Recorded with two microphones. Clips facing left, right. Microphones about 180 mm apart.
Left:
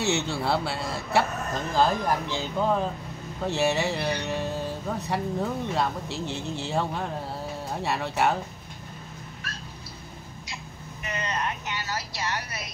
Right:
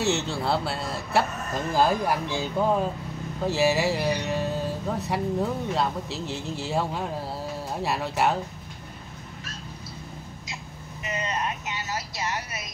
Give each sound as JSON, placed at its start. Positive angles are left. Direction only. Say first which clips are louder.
{"t": 0.0, "sound": "speech", "louder": "right 1 dB", "side_deg": 0}
{"t": 11.1, "sound": "vehicle", "louder": "right 1 dB", "side_deg": -20}